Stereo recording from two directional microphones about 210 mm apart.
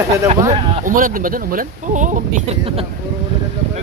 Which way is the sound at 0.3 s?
25° right (ahead or behind).